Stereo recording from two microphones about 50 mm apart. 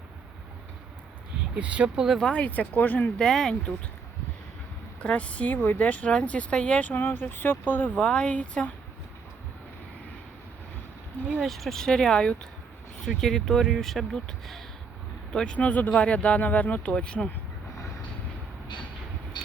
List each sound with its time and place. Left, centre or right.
1.5 s speech: right
2.5 s speech: left
3.2 s speech: centre
5.0 s speech: left
6.1 s speech: left
6.9 s speech: left
7.9 s speech: left
11.3 s speech: centre
11.9 s speech: centre
15.5 s speech: left
16.9 s speech: centre